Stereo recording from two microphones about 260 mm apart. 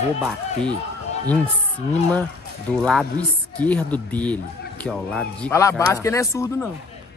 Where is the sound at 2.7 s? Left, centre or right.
Centre.